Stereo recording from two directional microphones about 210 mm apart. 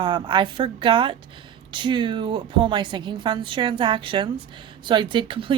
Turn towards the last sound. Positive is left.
turn(degrees=-25)  # may be behind; listen again after turning